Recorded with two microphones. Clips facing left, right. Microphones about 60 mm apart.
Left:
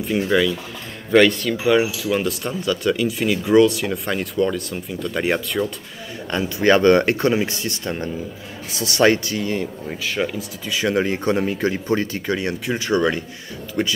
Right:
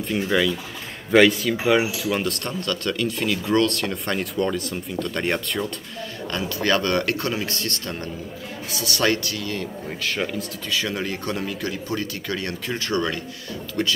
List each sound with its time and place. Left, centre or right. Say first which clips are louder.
0.0 s speech: left 3 dB; centre
6.3 s speech: left 6 dB; left
9.8 s speech: left 1 dB; centre
10.8 s speech: left 9 dB; left